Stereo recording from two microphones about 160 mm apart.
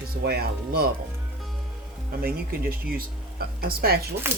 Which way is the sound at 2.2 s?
65° right (ahead or behind).